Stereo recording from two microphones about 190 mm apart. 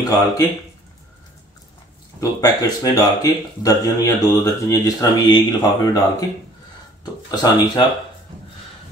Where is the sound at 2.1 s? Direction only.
20° left (ahead or behind).